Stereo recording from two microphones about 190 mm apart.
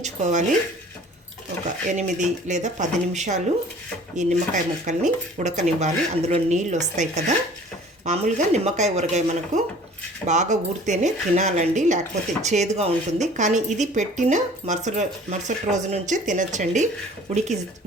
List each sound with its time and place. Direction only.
0.0 s speech: 40° right (ahead or behind)
1.9 s speech: 40° right (ahead or behind)